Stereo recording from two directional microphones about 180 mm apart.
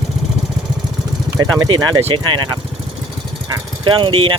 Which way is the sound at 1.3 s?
20° right (ahead or behind).